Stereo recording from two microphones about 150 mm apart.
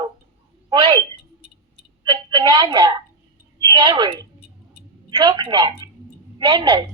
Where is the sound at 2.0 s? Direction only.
30° right (ahead or behind).